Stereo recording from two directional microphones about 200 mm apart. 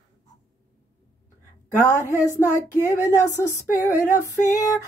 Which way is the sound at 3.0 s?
15° left (ahead or behind).